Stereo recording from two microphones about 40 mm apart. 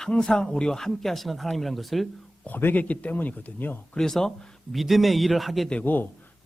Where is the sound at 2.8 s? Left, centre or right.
Left.